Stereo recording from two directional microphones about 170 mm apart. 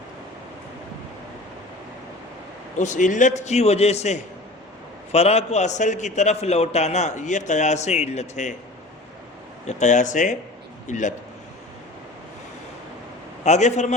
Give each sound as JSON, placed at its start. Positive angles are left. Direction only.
{"t": 2.7, "sound": "a man's voice", "side_deg": 45}
{"t": 9.6, "sound": "a man's voice", "side_deg": 45}
{"t": 13.4, "sound": "a man's voice", "side_deg": 40}